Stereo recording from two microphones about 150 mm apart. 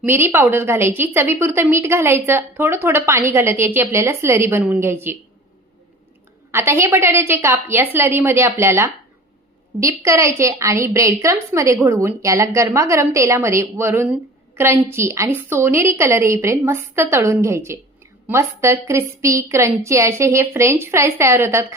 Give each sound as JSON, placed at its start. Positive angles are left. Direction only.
{"t": 0.0, "sound": "a woman's voice", "side_deg": -15}
{"t": 6.5, "sound": "a woman's voice", "side_deg": -15}